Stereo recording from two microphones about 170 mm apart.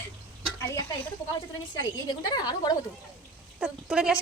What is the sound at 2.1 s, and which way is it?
Speech, 25° left (ahead or behind).